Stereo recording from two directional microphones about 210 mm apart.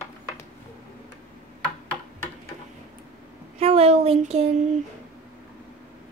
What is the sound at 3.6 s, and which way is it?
Speech, 30° right (ahead or behind).